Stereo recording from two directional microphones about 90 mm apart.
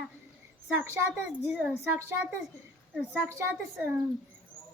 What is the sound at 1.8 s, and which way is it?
A child's voice, 30° right (ahead or behind).